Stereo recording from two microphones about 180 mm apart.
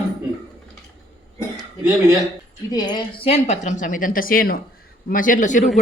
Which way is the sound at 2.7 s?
20° left (ahead or behind).